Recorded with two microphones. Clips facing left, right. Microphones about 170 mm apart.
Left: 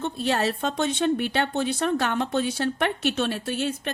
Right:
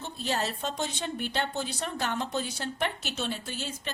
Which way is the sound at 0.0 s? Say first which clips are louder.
Left 7 dB; 65° left (ahead or behind).